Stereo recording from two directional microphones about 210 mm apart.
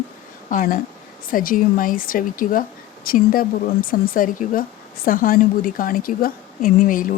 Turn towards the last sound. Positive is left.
turn(degrees=40)  # may be behind; listen again after turning